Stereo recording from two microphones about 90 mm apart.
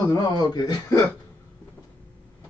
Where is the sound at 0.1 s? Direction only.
45° left (ahead or behind).